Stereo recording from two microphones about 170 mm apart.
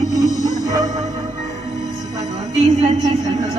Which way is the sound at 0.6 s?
20° right (ahead or behind).